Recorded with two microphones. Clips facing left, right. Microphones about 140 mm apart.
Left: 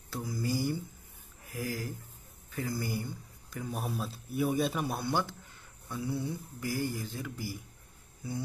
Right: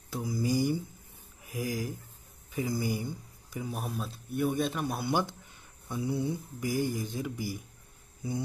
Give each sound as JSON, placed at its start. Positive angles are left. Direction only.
{"t": 0.1, "sound": "speech", "side_deg": -15}
{"t": 3.8, "sound": "a man's voice", "side_deg": 0}
{"t": 5.0, "sound": "speech", "side_deg": -15}